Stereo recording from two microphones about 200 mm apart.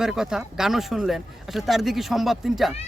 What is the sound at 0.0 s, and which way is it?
Speech, centre (ahead or behind).